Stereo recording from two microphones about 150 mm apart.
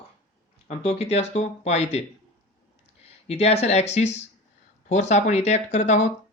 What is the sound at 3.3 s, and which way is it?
Speech, 45° left (ahead or behind).